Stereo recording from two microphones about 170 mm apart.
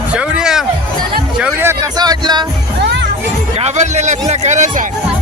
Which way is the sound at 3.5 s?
40° right (ahead or behind).